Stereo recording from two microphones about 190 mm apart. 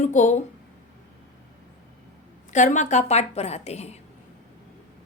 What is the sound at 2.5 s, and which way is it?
A woman's voice, 40° left (ahead or behind).